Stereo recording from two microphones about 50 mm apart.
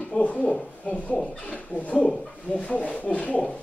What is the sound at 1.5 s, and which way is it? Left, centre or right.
Speech, left.